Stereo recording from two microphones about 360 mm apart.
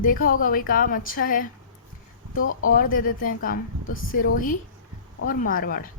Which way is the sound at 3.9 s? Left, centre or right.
Left.